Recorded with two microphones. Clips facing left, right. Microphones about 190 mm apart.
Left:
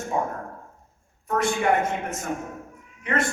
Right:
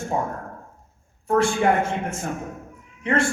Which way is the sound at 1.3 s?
30° right (ahead or behind).